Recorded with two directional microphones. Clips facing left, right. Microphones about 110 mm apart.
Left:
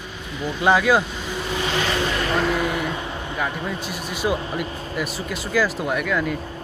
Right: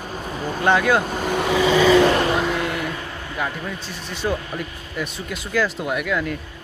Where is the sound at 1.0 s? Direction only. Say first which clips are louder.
Right 7 dB; 50° right (ahead or behind).